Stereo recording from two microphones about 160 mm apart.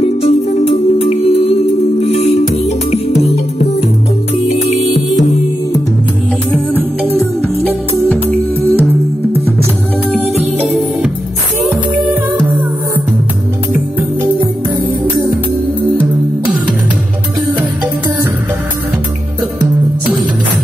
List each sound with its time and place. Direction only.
0.0 s music: 40° left (ahead or behind)
4.6 s music: 45° left (ahead or behind)
8.1 s music: 10° left (ahead or behind)
10.6 s music: 5° right (ahead or behind)